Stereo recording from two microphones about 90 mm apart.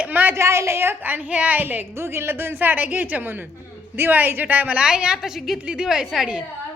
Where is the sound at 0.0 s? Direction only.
20° right (ahead or behind).